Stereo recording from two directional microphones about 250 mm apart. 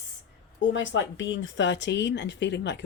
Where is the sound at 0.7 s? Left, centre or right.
Left.